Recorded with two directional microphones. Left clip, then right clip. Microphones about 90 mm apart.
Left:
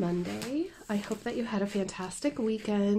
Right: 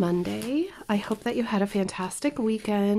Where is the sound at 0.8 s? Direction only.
90° right.